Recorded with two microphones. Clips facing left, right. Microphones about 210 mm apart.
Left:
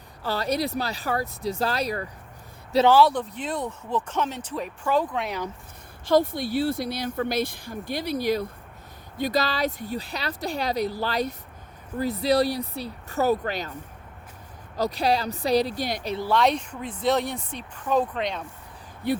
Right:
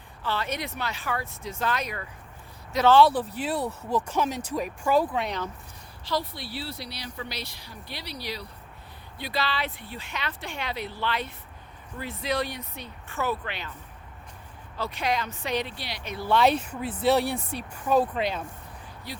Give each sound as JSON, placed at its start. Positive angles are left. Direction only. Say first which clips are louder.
{"t": 0.2, "sound": "speech", "louder": "left 5 dB", "side_deg": 40}
{"t": 3.0, "sound": "speech", "louder": "even", "side_deg": -5}
{"t": 6.1, "sound": "speech", "louder": "left 10 dB", "side_deg": 50}
{"t": 14.8, "sound": "speech", "louder": "left 5 dB", "side_deg": 35}
{"t": 16.3, "sound": "speech", "louder": "right 1 dB", "side_deg": -5}
{"t": 19.1, "sound": "speech", "louder": "left 15 dB", "side_deg": 55}